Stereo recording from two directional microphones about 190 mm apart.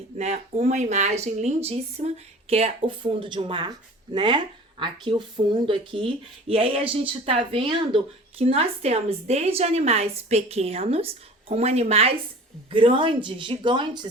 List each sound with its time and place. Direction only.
0.2 s speech: 35° right (ahead or behind)